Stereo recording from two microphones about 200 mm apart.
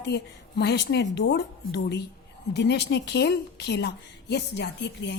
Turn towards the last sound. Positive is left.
turn(degrees=60)  # may be behind; listen again after turning